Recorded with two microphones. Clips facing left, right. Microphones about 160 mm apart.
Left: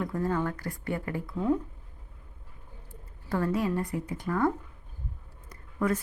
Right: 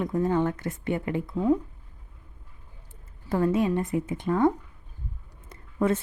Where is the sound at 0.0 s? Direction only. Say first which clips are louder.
Right 5 dB; 20° right (ahead or behind).